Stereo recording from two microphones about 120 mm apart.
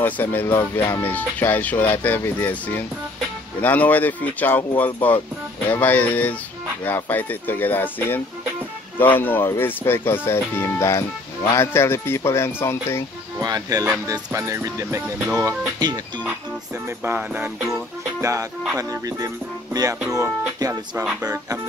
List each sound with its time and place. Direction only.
0.0 s speech: 15° left (ahead or behind)
13.4 s speech: 30° right (ahead or behind)
17.0 s speech: 15° right (ahead or behind)
17.6 s music: centre (ahead or behind)
18.2 s speech: 25° right (ahead or behind)